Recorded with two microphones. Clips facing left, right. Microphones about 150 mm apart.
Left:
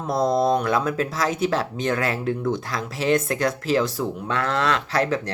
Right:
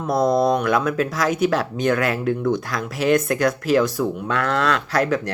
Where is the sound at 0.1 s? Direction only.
25° left (ahead or behind).